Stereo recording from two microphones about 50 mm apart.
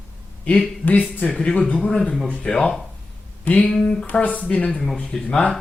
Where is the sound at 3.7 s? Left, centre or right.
Centre.